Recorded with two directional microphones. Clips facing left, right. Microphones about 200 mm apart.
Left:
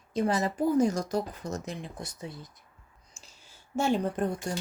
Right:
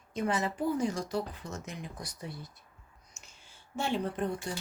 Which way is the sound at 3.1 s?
30° left (ahead or behind).